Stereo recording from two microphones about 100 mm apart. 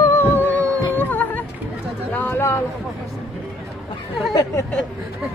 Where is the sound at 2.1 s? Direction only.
20° left (ahead or behind).